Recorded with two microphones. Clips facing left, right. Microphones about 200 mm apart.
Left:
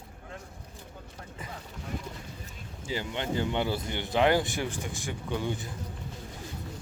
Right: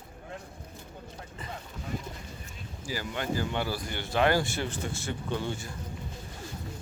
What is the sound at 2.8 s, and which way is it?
Speech, 20° left (ahead or behind).